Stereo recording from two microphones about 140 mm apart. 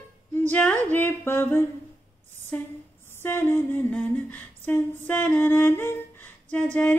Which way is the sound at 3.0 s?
15° left (ahead or behind).